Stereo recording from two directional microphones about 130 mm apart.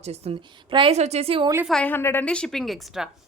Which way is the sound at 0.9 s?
55° right (ahead or behind).